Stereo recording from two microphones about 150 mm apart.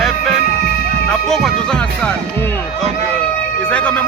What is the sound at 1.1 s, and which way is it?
Speech, centre (ahead or behind).